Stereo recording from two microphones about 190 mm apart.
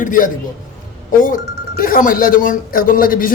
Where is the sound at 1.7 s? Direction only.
50° left (ahead or behind).